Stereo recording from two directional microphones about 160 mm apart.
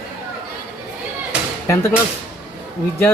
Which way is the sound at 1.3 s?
5° right (ahead or behind).